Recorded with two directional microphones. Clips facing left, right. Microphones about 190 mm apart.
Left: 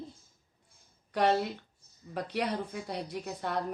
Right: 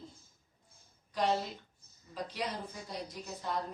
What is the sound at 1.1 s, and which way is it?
A woman's voice, 65° left (ahead or behind).